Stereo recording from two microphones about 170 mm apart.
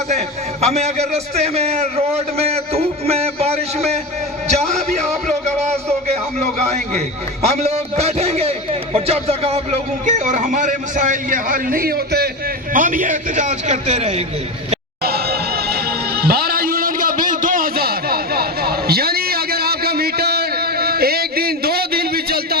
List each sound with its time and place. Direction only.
0.6 s a man's voice: 40° right (ahead or behind)
4.7 s a sound: 40° right (ahead or behind)
6.7 s a man's voice: 40° right (ahead or behind); by 12.3 s 65° right (ahead or behind)
12.7 s a man's voice: 50° right (ahead or behind)
15.0 s music: 65° right (ahead or behind)